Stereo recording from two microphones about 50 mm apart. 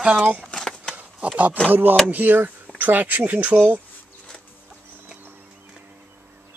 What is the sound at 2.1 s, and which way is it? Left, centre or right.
Speech, right.